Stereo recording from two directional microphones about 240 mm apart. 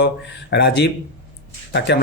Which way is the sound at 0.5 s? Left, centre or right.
Left.